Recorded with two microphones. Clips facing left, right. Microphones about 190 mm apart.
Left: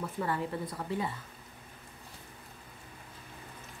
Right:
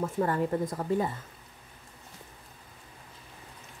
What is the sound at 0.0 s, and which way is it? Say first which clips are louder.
Speech: right 6 dB; 45° right (ahead or behind).